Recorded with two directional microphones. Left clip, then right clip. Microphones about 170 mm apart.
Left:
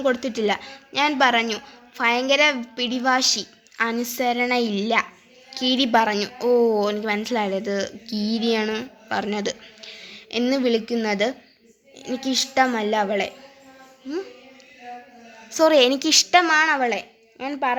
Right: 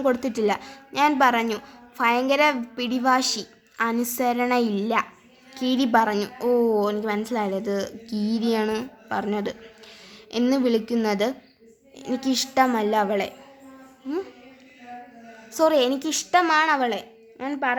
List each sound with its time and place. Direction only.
0.0 s a woman's voice: centre (ahead or behind)
3.9 s a woman's voice: centre (ahead or behind)
15.4 s a woman's voice: 10° left (ahead or behind)
16.4 s a woman's voice: centre (ahead or behind)
17.7 s speech: 35° left (ahead or behind)